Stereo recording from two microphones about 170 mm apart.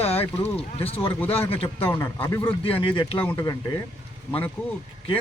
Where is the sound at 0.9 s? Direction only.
10° left (ahead or behind).